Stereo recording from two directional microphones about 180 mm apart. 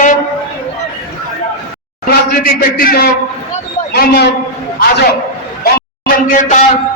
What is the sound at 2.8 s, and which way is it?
A man's voice, 55° left (ahead or behind).